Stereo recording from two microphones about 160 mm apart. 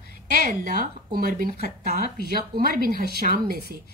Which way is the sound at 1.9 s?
70° right (ahead or behind).